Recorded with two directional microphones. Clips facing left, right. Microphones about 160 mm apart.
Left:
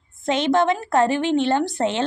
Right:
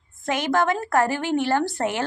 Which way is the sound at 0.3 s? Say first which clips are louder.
Left 3 dB; 20° left (ahead or behind).